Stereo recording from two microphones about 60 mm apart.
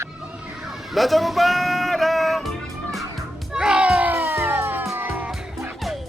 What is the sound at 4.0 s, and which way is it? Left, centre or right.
Music, right.